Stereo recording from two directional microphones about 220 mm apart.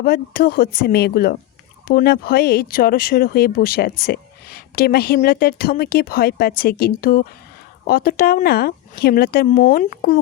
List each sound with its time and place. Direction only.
0.0 s speech: 45° left (ahead or behind)